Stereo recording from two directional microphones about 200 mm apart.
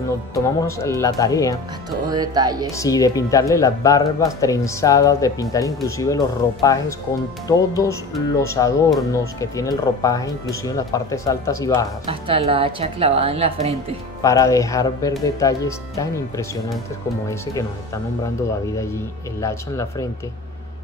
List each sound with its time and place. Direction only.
0.3 s speech: 15° left (ahead or behind)
1.9 s speech: 20° right (ahead or behind)
2.7 s speech: 15° left (ahead or behind)
12.1 s speech: 30° right (ahead or behind)
14.2 s speech: 15° left (ahead or behind)
19.4 s speech: 15° left (ahead or behind)